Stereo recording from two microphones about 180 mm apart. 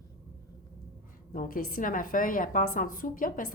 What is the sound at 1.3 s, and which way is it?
A woman's voice, 50° left (ahead or behind).